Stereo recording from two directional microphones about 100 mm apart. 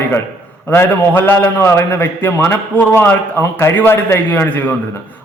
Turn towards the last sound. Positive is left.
turn(degrees=15)  # may be behind; listen again after turning